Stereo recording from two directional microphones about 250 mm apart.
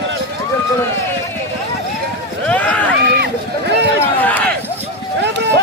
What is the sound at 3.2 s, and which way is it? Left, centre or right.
Run, right.